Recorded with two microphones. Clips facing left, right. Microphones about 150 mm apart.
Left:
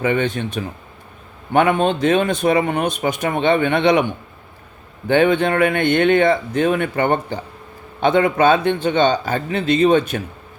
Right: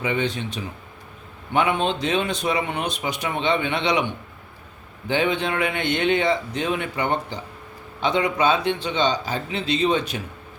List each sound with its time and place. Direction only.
0.0 s speech: 55° left (ahead or behind)